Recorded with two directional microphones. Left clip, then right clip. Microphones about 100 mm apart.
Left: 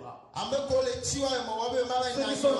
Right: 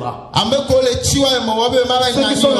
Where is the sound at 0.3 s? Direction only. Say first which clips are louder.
Right 14 dB; 5° right (ahead or behind).